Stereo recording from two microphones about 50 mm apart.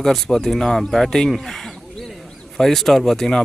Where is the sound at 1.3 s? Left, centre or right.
Centre.